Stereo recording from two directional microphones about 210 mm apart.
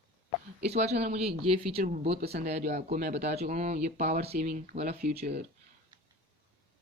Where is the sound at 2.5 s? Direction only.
30° right (ahead or behind).